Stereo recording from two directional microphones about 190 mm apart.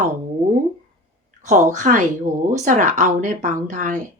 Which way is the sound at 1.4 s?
40° right (ahead or behind).